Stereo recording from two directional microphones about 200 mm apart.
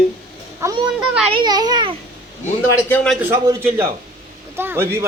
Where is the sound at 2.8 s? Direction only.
5° left (ahead or behind).